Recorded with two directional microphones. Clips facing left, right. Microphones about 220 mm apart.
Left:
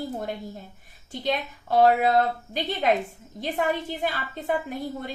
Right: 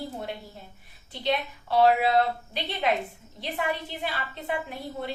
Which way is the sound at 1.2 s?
45° left (ahead or behind).